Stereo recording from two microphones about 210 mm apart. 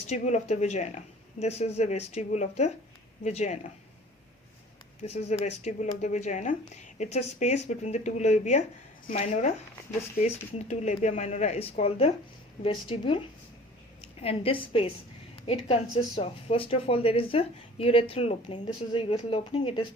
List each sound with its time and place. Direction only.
0.1 s speech: 30° left (ahead or behind)
5.0 s a woman's voice: 30° left (ahead or behind)